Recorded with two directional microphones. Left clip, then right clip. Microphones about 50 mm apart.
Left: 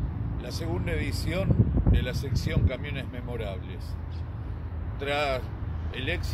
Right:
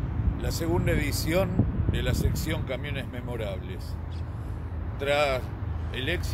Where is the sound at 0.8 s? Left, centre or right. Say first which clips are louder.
Right 4 dB; right.